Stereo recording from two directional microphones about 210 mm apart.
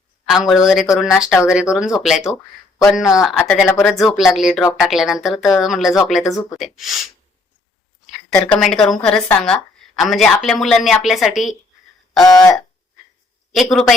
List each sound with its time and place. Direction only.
0.3 s speech: centre (ahead or behind)
3.7 s speech: 10° left (ahead or behind)
4.0 s speech: centre (ahead or behind)
8.3 s a woman's voice: 15° left (ahead or behind)
8.5 s speech: centre (ahead or behind)
12.2 s speech: 15° left (ahead or behind)
13.5 s speech: centre (ahead or behind)